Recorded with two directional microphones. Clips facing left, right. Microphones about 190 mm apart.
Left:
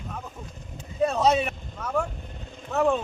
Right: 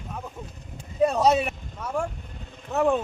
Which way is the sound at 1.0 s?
10° right (ahead or behind).